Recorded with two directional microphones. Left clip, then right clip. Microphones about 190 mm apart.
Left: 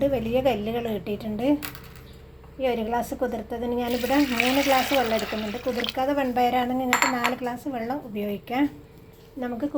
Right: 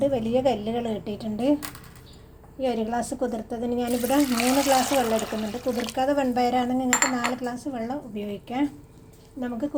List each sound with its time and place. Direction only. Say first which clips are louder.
0.0 s a woman's voice: even; 5° right (ahead or behind)
2.6 s a woman's voice: left 1 dB; 15° right (ahead or behind)